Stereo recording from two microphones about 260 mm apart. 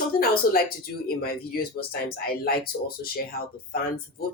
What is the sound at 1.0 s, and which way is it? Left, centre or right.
Speech, left.